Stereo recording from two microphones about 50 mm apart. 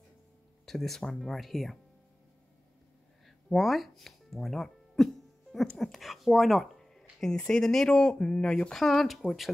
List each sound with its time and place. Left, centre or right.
0.7 s speech: centre
3.5 s speech: centre; by 8.7 s left
8.7 s speech: centre